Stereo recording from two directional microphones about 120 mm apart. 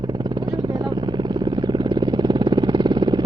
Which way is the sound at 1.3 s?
35° right (ahead or behind).